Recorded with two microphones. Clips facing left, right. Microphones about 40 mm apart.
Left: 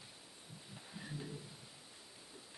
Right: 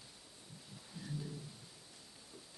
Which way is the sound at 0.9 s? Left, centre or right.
Left.